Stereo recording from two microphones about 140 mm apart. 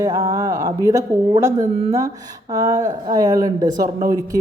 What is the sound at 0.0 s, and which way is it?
Speech, 25° right (ahead or behind).